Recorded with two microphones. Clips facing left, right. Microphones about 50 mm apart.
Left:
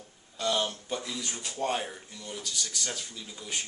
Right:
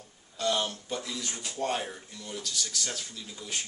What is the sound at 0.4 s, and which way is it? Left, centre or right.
Speech, centre.